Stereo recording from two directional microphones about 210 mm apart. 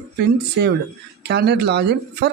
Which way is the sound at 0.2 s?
50° right (ahead or behind).